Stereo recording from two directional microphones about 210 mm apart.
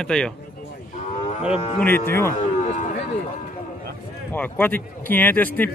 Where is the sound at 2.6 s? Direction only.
35° left (ahead or behind).